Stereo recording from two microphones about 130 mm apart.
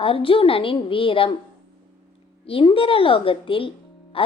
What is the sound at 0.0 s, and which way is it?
A woman's voice, 45° left (ahead or behind).